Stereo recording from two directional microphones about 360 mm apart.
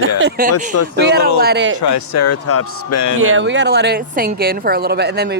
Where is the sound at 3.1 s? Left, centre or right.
Right.